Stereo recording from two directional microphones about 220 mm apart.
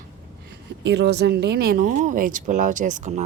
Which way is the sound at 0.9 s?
50° right (ahead or behind).